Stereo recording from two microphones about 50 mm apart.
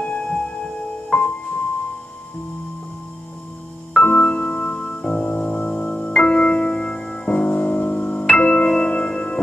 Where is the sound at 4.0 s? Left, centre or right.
Left.